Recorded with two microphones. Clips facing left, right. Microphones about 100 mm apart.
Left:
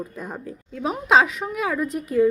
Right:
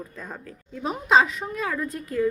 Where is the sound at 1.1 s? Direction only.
70° left (ahead or behind).